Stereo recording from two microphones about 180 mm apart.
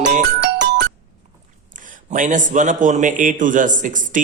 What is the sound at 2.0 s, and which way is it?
A man's voice, 45° right (ahead or behind).